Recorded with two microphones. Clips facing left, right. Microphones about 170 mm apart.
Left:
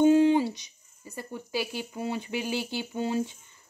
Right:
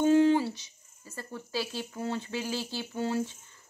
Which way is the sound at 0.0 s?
20° left (ahead or behind).